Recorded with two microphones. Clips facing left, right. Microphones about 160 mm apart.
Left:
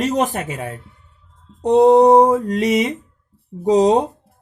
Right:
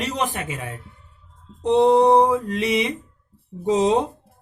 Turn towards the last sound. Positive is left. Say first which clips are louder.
# left 5 dB
turn(degrees=35)  # may be behind; listen again after turning